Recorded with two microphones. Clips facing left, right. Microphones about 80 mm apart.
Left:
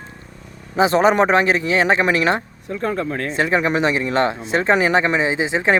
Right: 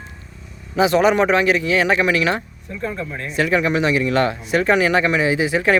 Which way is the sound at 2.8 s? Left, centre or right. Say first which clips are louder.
Left 4 dB; left.